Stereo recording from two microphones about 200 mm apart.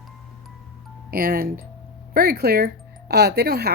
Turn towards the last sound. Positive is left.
turn(degrees=-55)  # may be behind; listen again after turning